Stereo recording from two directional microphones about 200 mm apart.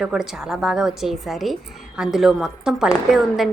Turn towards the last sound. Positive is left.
turn(degrees=0)  # may be behind; listen again after turning